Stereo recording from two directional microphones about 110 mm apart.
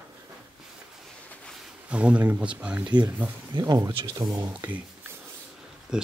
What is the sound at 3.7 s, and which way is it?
Speech, 25° right (ahead or behind).